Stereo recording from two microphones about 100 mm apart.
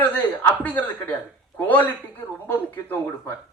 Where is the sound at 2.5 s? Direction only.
20° left (ahead or behind).